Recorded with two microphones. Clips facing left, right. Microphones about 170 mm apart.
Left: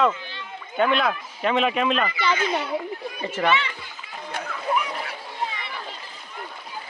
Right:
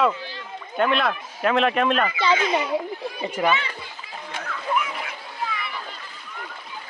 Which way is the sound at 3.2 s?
10° right (ahead or behind).